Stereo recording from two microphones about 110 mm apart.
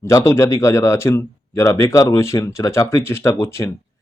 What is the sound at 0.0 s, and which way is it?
A man's voice, 25° left (ahead or behind).